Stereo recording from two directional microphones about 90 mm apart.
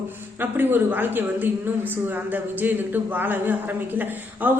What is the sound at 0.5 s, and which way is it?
Speech, 20° right (ahead or behind).